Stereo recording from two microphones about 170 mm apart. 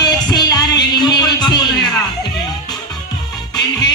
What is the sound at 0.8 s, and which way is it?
Music, 25° left (ahead or behind).